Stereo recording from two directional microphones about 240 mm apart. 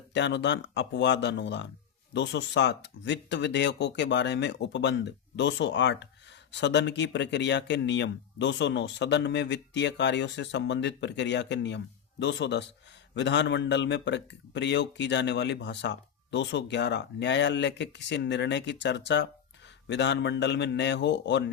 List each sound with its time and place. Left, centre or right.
0.1 s a man's voice: left